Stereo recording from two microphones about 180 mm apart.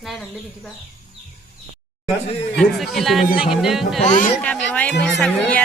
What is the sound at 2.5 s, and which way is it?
Speech, centre (ahead or behind).